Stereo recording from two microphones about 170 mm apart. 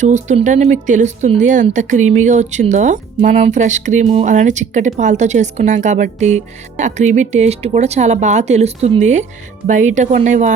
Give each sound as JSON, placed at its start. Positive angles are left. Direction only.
{"t": 0.0, "sound": "speech", "side_deg": -45}